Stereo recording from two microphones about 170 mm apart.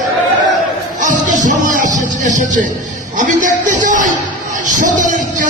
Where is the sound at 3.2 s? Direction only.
50° right (ahead or behind).